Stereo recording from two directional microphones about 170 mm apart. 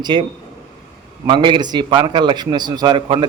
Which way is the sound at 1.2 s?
25° right (ahead or behind).